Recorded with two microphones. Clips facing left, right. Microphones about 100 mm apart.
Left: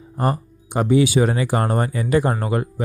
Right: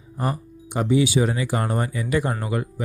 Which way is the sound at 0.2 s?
45° left (ahead or behind).